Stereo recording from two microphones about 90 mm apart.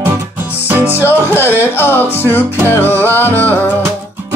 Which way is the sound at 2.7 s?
25° left (ahead or behind).